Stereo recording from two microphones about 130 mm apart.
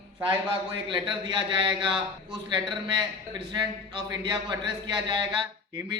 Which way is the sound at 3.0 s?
35° right (ahead or behind).